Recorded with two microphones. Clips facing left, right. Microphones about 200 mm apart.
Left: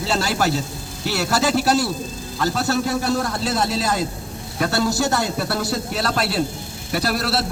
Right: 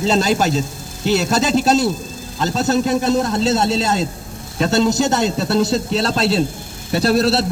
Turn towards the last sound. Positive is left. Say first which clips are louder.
# right 7 dB
turn(degrees=-25)  # may be behind; listen again after turning